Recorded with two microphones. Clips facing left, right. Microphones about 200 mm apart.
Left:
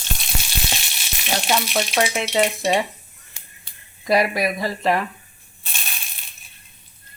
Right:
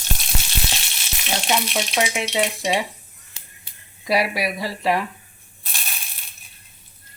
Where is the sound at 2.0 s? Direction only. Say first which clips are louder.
Left 2 dB; 10° right (ahead or behind).